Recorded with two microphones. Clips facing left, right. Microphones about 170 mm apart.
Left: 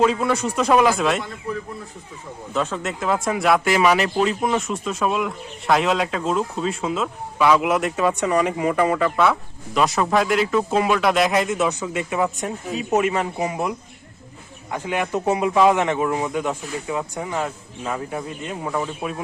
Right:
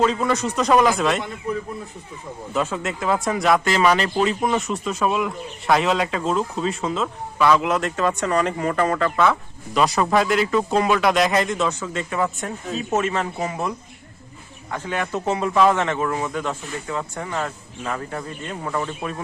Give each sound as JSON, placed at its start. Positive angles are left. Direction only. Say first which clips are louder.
{"t": 0.0, "sound": "speech", "louder": "left 1 dB", "side_deg": 5}
{"t": 1.5, "sound": "speech", "louder": "right 3 dB", "side_deg": -20}
{"t": 2.5, "sound": "speech", "louder": "even", "side_deg": -5}